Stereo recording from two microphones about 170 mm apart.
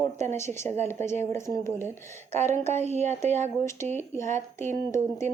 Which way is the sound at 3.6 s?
15° left (ahead or behind).